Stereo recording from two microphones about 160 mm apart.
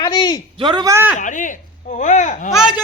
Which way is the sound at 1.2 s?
50° left (ahead or behind).